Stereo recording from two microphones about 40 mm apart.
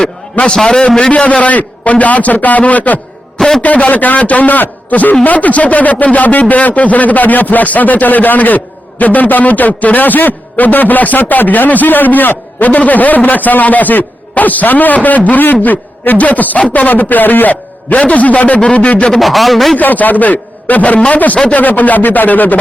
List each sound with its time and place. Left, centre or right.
0.5 s a man's voice: centre
0.8 s a man's voice: left
3.3 s a sound: centre
3.6 s a man's voice: left
19.2 s a man's voice: centre
19.7 s a man's voice: left